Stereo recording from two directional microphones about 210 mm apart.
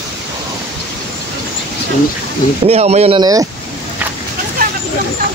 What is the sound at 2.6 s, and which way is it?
Speech, 30° right (ahead or behind).